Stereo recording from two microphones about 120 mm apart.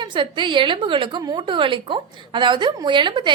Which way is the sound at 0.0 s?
40° right (ahead or behind).